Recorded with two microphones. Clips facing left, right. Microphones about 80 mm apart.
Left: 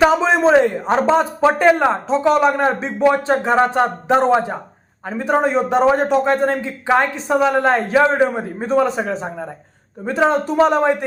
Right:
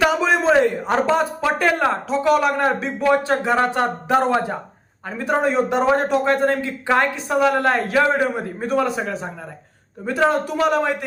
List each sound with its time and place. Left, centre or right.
0.0 s a sound: left
0.5 s speech: centre
10.2 s speech: left